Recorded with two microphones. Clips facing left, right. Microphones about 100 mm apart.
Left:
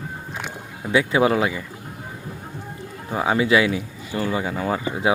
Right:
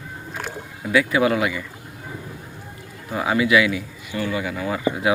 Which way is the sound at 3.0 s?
30° left (ahead or behind).